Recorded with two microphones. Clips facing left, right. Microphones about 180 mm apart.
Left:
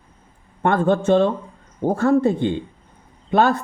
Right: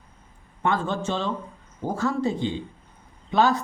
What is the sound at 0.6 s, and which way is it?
Speech, 55° left (ahead or behind).